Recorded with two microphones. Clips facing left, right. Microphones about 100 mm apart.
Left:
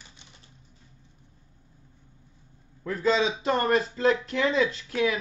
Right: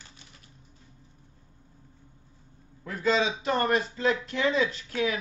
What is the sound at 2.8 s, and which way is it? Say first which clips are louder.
A man's voice: left 2 dB; 35° left (ahead or behind).